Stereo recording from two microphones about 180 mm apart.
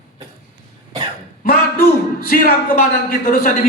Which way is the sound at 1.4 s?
55° left (ahead or behind).